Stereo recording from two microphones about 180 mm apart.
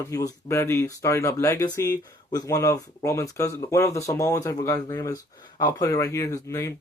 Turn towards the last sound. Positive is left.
turn(degrees=15)  # may be behind; listen again after turning